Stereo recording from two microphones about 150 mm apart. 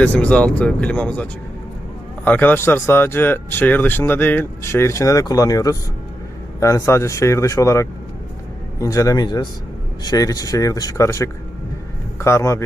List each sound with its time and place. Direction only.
0.0 s speech: 10° left (ahead or behind)